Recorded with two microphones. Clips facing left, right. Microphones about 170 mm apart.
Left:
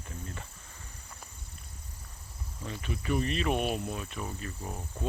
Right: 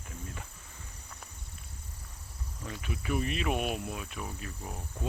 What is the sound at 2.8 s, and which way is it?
Speech, 5° right (ahead or behind).